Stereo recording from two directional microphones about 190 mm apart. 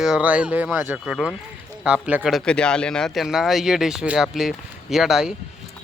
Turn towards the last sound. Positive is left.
turn(degrees=-5)  # may be behind; listen again after turning